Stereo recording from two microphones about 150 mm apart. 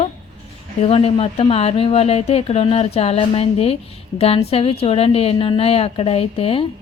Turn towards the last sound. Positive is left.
turn(degrees=40)  # may be behind; listen again after turning